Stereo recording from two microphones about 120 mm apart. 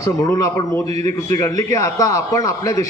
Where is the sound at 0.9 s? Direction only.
65° right (ahead or behind).